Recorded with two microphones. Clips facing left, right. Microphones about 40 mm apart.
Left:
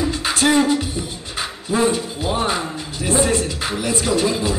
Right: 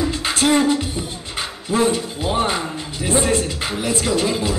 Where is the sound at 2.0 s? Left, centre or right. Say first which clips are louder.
Even; centre.